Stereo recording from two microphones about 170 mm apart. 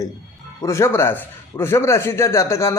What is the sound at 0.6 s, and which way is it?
A man's voice, 15° left (ahead or behind).